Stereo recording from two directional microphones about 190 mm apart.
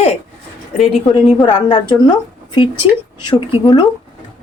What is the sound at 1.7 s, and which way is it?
Speech, 25° left (ahead or behind).